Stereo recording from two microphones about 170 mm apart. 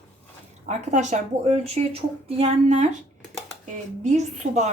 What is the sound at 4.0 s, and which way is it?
Speech, 45° right (ahead or behind).